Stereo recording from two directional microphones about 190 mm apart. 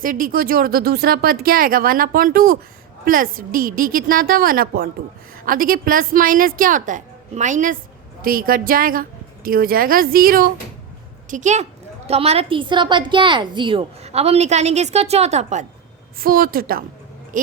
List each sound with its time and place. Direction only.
0.0 s a woman's voice: 45° right (ahead or behind)
16.1 s speech: 50° right (ahead or behind)